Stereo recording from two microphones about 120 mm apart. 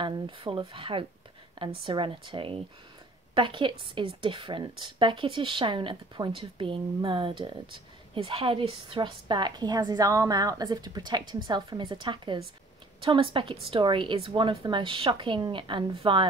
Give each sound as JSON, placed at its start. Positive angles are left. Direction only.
{"t": 0.0, "sound": "a woman's voice", "side_deg": -45}